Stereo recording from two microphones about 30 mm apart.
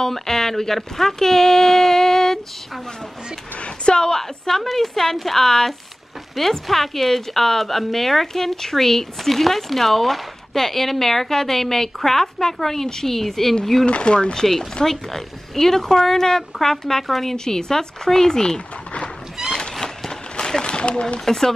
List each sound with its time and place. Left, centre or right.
0.1 s speech: centre
3.6 s speech: left
4.2 s a woman's voice: centre
5.4 s speech: centre
6.3 s speech: centre
13.8 s speech: left
14.4 s speech: centre
19.5 s a sound: left
20.3 s speech: left
21.3 s speech: centre